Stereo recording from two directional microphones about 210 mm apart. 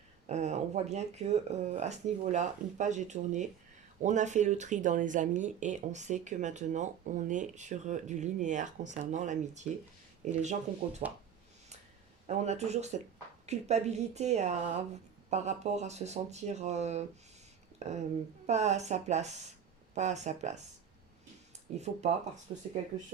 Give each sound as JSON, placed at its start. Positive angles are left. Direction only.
{"t": 0.3, "sound": "speech", "side_deg": -30}
{"t": 12.3, "sound": "speech", "side_deg": -30}
{"t": 21.8, "sound": "speech", "side_deg": -30}